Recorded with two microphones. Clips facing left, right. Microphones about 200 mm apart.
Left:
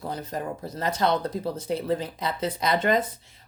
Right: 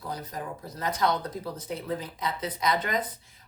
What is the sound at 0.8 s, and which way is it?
Speech, 30° left (ahead or behind).